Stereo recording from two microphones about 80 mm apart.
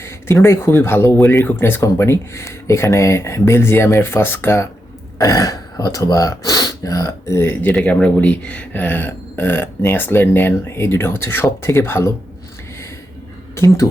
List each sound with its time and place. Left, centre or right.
0.0 s speech: left
5.1 s speech: left